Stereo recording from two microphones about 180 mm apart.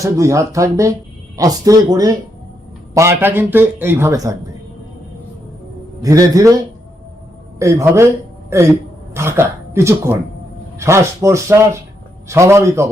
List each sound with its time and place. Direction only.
0.0 s a man's voice: 15° right (ahead or behind)
6.0 s speech: 20° right (ahead or behind)
7.6 s a man's voice: 15° right (ahead or behind)
9.1 s a man's voice: 15° right (ahead or behind)